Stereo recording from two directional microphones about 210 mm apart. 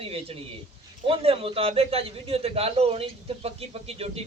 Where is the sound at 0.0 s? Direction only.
25° right (ahead or behind).